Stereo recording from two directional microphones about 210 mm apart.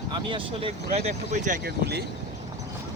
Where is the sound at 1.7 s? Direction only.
50° right (ahead or behind).